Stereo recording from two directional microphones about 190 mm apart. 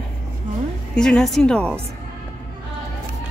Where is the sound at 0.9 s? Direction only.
5° left (ahead or behind).